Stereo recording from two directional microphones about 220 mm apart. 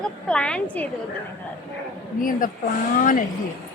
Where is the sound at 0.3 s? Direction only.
5° left (ahead or behind).